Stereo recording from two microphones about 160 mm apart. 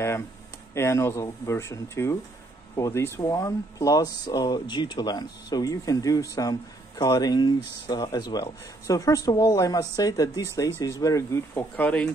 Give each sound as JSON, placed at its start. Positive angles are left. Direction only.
{"t": 0.7, "sound": "speech", "side_deg": 15}